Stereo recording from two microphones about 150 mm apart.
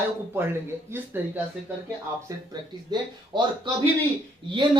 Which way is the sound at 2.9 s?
30° right (ahead or behind).